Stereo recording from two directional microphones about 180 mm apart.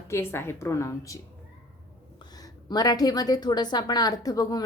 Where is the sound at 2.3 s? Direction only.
20° left (ahead or behind).